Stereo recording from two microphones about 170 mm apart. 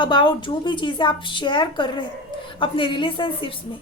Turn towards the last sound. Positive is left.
turn(degrees=30)  # may be behind; listen again after turning